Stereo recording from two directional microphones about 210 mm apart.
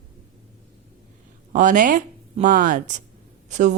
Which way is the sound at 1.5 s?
40° right (ahead or behind).